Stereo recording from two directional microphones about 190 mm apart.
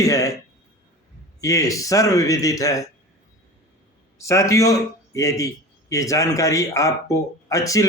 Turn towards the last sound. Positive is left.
turn(degrees=15)  # may be behind; listen again after turning